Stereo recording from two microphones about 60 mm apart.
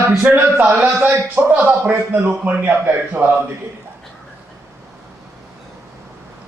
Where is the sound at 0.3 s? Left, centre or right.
Right.